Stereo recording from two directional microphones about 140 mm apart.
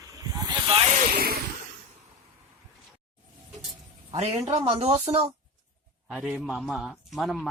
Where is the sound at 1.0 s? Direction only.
90° right.